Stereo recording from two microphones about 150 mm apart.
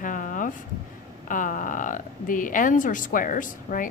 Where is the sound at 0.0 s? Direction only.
60° left (ahead or behind).